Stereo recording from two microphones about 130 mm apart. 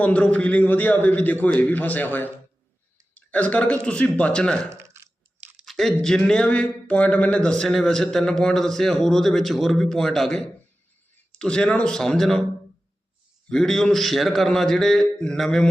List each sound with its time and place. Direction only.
0.0 s a man's voice: 10° left (ahead or behind)
4.7 s chewing: 20° right (ahead or behind)
5.4 s a sound: 10° right (ahead or behind)
5.6 s speech: 5° left (ahead or behind)
13.5 s speech: 5° left (ahead or behind)